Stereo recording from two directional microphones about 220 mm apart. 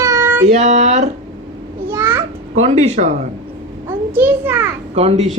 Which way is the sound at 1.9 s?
10° right (ahead or behind).